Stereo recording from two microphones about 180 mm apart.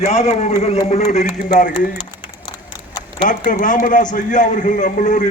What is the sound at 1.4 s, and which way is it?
Speech, 45° left (ahead or behind).